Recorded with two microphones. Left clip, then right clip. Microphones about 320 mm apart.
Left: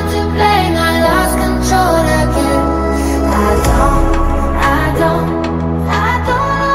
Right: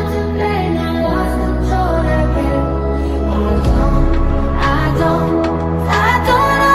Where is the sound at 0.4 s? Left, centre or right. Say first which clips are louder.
Left 8 dB; left.